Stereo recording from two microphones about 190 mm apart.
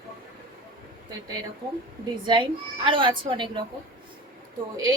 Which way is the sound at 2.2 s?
25° right (ahead or behind).